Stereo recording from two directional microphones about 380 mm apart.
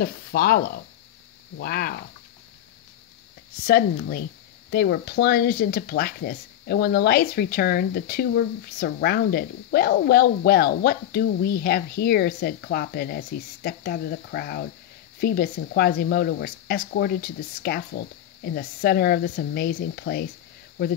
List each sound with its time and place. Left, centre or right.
0.0 s speech: left
3.6 s speech: left